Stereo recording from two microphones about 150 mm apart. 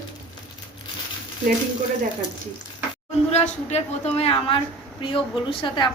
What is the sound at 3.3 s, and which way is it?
A woman's voice, 45° left (ahead or behind).